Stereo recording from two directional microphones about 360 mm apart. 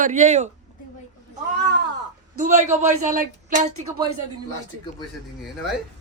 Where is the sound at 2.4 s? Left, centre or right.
Right.